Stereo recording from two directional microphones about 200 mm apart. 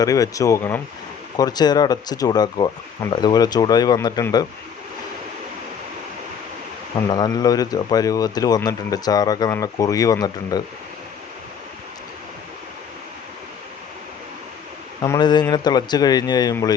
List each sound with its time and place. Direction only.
0.0 s speech: 15° left (ahead or behind)
7.1 s speech: 20° left (ahead or behind)
15.0 s speech: 20° left (ahead or behind)